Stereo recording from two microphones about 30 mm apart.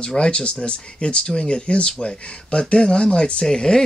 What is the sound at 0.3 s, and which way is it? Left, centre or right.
Speech, left.